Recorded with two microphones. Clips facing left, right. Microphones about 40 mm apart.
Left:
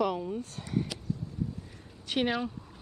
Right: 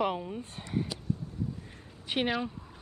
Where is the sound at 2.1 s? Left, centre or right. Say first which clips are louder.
Left 1 dB; centre.